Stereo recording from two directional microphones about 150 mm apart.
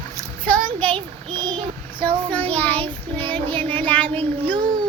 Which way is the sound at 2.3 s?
10° left (ahead or behind).